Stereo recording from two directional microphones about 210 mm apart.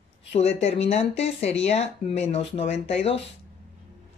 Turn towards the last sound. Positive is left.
turn(degrees=30)  # may be behind; listen again after turning